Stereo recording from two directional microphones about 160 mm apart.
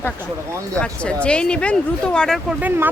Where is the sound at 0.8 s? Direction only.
5° left (ahead or behind).